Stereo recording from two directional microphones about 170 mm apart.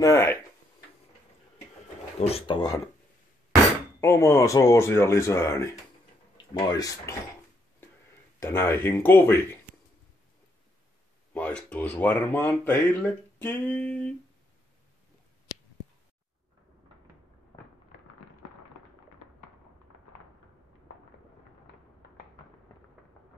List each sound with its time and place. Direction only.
0.0 s speech: 15° left (ahead or behind)
2.1 s speech: 35° left (ahead or behind)
4.0 s speech: 15° left (ahead or behind)
6.7 s speech: 20° left (ahead or behind)
8.4 s speech: 15° left (ahead or behind)
11.3 s speech: 5° left (ahead or behind)